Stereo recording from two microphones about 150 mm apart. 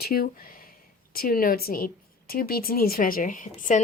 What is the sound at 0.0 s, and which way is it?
Speech, 90° left.